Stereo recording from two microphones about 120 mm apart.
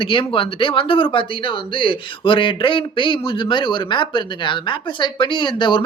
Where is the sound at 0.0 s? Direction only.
45° left (ahead or behind).